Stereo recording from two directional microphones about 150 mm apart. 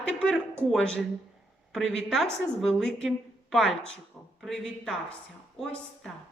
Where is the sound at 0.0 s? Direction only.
5° left (ahead or behind).